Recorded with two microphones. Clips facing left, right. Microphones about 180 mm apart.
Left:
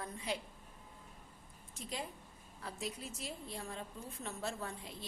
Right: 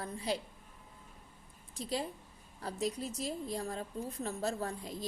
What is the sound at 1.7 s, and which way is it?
A woman's voice, 35° right (ahead or behind).